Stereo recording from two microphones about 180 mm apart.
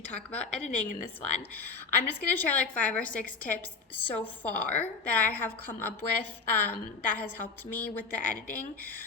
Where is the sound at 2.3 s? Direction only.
10° left (ahead or behind).